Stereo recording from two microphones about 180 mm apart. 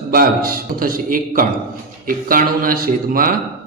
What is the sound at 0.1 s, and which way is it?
A man's voice, 55° right (ahead or behind).